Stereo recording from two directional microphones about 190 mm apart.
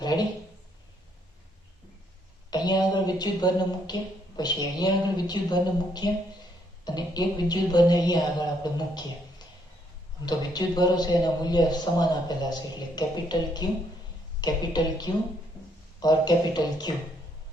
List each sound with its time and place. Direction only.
0.0 s a sound: 20° left (ahead or behind)
2.5 s a man's voice: 20° left (ahead or behind)
10.2 s a man's voice: 20° left (ahead or behind)